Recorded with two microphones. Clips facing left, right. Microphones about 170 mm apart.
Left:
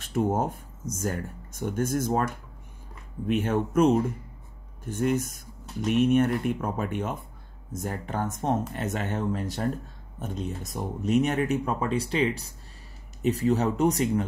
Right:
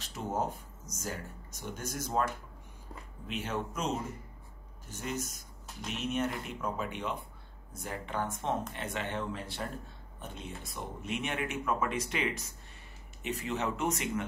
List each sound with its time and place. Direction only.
0.0 s speech: 50° left (ahead or behind)
3.3 s speech: 50° left (ahead or behind); by 14.2 s 35° left (ahead or behind)